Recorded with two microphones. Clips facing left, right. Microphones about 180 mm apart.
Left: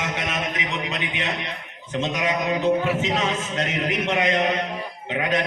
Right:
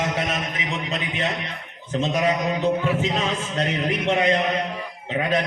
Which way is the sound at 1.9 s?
35° right (ahead or behind).